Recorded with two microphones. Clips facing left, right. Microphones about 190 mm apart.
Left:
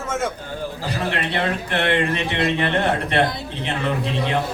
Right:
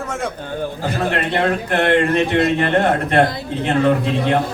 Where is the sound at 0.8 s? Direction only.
50° right (ahead or behind).